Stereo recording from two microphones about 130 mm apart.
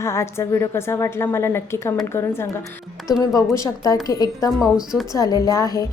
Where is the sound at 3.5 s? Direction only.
25° left (ahead or behind).